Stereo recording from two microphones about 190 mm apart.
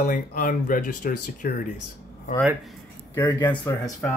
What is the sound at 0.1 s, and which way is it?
Speech, 45° left (ahead or behind).